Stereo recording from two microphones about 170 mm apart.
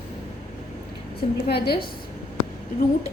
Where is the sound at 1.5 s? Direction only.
70° left (ahead or behind).